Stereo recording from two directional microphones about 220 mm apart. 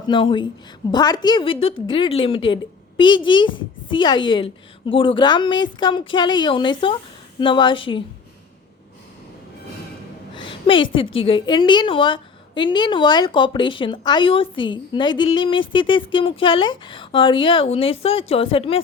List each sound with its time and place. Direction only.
0.1 s a woman's voice: 20° left (ahead or behind)
10.3 s a woman's voice: 20° left (ahead or behind)